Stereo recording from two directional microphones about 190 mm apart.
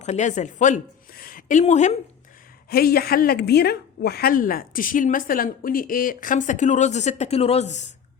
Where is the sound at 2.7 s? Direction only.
55° left (ahead or behind).